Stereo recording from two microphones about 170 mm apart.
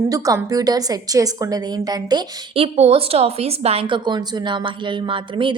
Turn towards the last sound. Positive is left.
turn(degrees=-30)  # may be behind; listen again after turning